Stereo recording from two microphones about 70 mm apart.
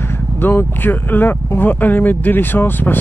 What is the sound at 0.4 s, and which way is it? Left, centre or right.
Speech, left.